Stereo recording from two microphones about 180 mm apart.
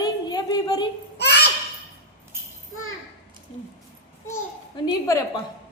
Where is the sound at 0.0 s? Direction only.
20° left (ahead or behind).